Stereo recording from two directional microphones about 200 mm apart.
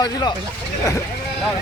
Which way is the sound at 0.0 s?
20° left (ahead or behind).